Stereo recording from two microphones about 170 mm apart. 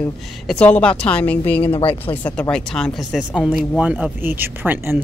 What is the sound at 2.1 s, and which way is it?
Speech, 10° left (ahead or behind).